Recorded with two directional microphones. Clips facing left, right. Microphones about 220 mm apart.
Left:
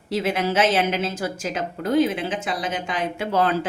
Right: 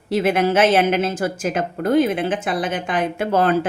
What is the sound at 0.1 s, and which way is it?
A woman's voice, 55° right (ahead or behind).